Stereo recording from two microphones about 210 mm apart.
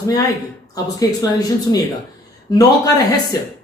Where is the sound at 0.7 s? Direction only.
15° left (ahead or behind).